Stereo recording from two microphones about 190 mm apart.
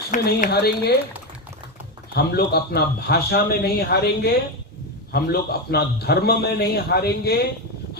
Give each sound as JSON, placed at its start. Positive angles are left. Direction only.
{"t": 0.1, "sound": "speech", "side_deg": 45}
{"t": 0.5, "sound": "a man's voice", "side_deg": 60}
{"t": 2.1, "sound": "a man's voice", "side_deg": 55}